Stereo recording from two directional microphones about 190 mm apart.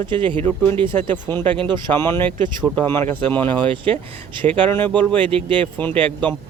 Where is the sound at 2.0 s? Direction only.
10° left (ahead or behind).